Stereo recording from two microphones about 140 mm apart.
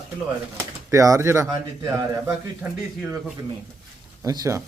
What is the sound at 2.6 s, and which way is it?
Speech, 10° right (ahead or behind).